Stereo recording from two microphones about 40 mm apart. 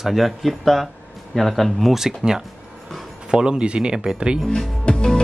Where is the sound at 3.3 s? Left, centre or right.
Right.